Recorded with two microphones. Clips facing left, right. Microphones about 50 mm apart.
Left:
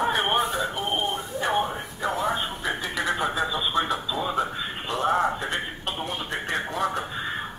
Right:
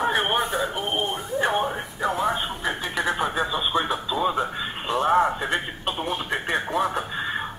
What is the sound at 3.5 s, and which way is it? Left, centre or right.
Radio, centre.